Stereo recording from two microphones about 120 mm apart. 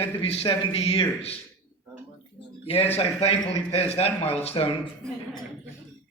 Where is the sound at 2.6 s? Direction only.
55° left (ahead or behind).